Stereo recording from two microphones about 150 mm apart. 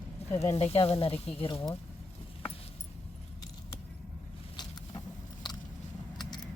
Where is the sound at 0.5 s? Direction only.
40° left (ahead or behind).